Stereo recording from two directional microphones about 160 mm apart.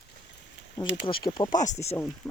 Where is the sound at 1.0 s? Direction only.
30° left (ahead or behind).